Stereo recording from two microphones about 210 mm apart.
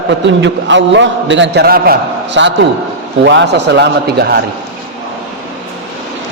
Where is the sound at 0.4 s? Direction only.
60° right (ahead or behind).